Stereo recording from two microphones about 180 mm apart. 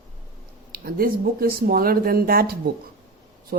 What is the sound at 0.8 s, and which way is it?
Speech, 55° right (ahead or behind).